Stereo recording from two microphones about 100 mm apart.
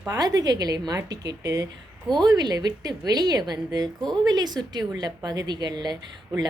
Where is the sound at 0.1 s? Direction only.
40° right (ahead or behind).